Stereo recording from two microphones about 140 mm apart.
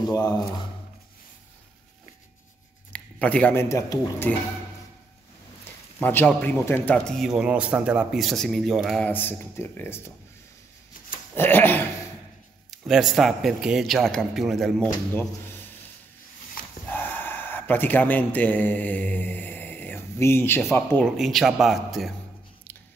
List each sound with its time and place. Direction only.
0.1 s speech: 30° left (ahead or behind)
2.9 s a sound: 10° left (ahead or behind)
3.6 s speech: 20° left (ahead or behind)
5.9 s speech: 10° left (ahead or behind)
7.1 s a man's voice: centre (ahead or behind)
9.0 s speech: 15° left (ahead or behind)
11.3 s speech: 15° left (ahead or behind)
12.7 s a man's voice: centre (ahead or behind)
15.1 s speech: 15° left (ahead or behind)
16.8 s speech: 15° left (ahead or behind)
21.0 s a man's voice: centre (ahead or behind)